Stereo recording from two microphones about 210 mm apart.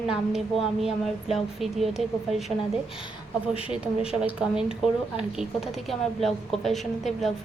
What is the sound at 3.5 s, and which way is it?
Speech, 25° left (ahead or behind).